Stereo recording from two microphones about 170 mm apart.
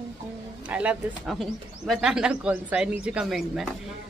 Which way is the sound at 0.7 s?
10° right (ahead or behind).